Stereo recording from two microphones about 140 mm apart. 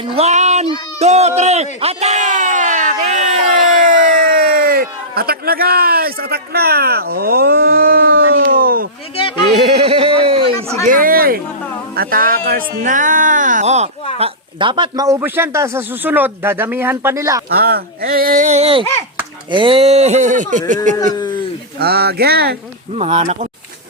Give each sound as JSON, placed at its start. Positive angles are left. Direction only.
{"t": 0.0, "sound": "a sound", "side_deg": -45}
{"t": 0.9, "sound": "speech", "side_deg": -50}
{"t": 1.8, "sound": "a sound", "side_deg": -50}
{"t": 9.1, "sound": "a sound", "side_deg": 40}
{"t": 9.5, "sound": "speech", "side_deg": -50}
{"t": 10.8, "sound": "speech", "side_deg": -85}
{"t": 14.2, "sound": "a man's voice", "side_deg": -40}
{"t": 17.5, "sound": "speech", "side_deg": -90}
{"t": 21.8, "sound": "speech", "side_deg": -90}
{"t": 23.0, "sound": "speech", "side_deg": -55}